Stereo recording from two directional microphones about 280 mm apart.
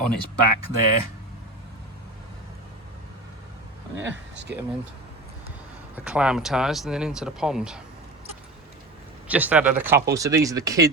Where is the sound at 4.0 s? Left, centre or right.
Right.